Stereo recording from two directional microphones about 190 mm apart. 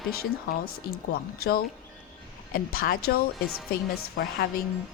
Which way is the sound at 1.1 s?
50° left (ahead or behind).